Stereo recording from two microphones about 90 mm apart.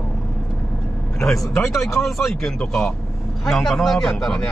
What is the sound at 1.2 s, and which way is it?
A man's voice, 5° left (ahead or behind).